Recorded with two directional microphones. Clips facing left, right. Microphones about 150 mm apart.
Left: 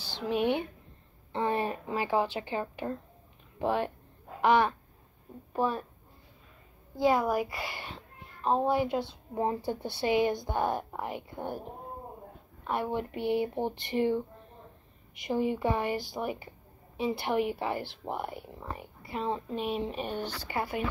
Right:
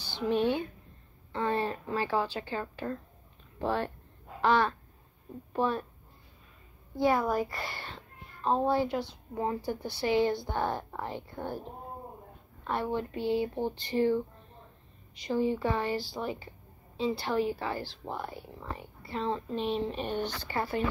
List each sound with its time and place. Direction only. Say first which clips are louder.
0.0 s a sound: right 2 dB; centre (ahead or behind)
0.4 s a woman's voice: even; 20° left (ahead or behind)
7.0 s a woman's voice: left 1 dB; 15° left (ahead or behind)
8.6 s speech: even; 20° left (ahead or behind)
12.6 s speech: even; 10° left (ahead or behind)
15.2 s speech: even; 20° left (ahead or behind)